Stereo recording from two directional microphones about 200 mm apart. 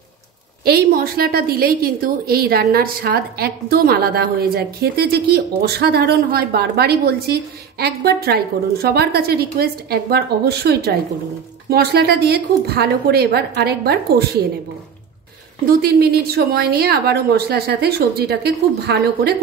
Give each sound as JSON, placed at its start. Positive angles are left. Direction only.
{"t": 0.7, "sound": "a woman's voice", "side_deg": -50}
{"t": 15.6, "sound": "a woman's voice", "side_deg": -50}